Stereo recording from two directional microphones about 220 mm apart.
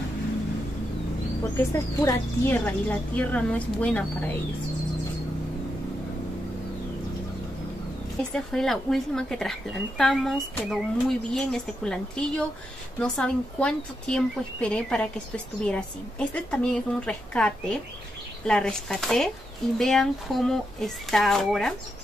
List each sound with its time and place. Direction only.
1.4 s speech: 15° left (ahead or behind)
8.3 s speech: centre (ahead or behind)